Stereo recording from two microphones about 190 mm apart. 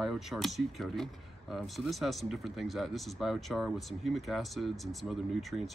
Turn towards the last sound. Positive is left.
turn(degrees=0)  # may be behind; listen again after turning